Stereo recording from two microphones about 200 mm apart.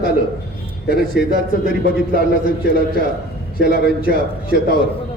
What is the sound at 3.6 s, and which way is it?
Speech, 45° right (ahead or behind).